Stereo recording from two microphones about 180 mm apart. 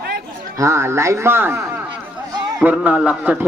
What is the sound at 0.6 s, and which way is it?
Speech, 15° right (ahead or behind).